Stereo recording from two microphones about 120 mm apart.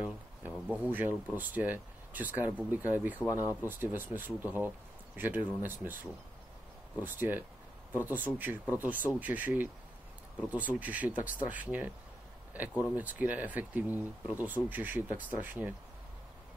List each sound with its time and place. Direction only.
0.0 s a sound: 15° right (ahead or behind)
1.3 s speech: 15° right (ahead or behind)
7.0 s speech: 15° right (ahead or behind)